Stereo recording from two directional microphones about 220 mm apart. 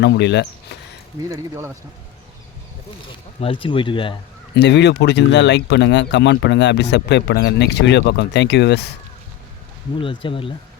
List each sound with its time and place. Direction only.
0.0 s speech: 50° left (ahead or behind)
1.3 s speech: 10° right (ahead or behind)
3.4 s speech: 25° left (ahead or behind)
4.5 s speech: 50° left (ahead or behind)
10.0 s speech: 25° left (ahead or behind)